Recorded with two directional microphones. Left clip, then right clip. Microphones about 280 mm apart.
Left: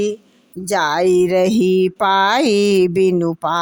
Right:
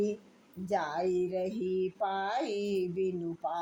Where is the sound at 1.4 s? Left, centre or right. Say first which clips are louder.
Left 18 dB; left.